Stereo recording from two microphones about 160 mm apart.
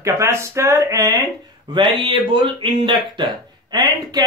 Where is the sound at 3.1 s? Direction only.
25° right (ahead or behind).